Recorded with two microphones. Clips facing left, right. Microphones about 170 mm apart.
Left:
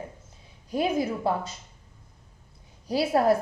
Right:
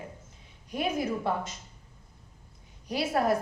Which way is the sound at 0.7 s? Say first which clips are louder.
Left 4 dB; 30° left (ahead or behind).